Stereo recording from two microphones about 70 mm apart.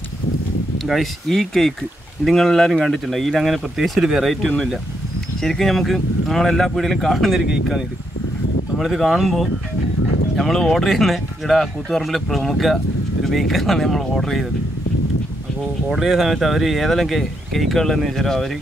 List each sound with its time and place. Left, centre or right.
0.8 s speech: centre
15.9 s speech: centre